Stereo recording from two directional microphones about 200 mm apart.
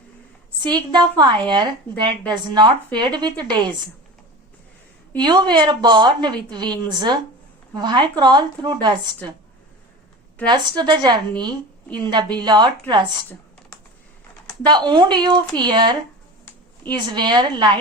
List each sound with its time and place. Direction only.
0.6 s a woman's voice: 20° right (ahead or behind)
5.1 s a woman's voice: 20° right (ahead or behind)
10.5 s a woman's voice: 20° right (ahead or behind)
14.6 s a woman's voice: 20° right (ahead or behind)